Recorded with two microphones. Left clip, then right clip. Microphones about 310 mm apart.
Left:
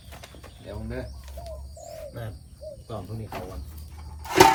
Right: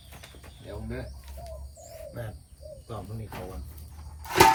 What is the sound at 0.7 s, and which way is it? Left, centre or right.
Speech, centre.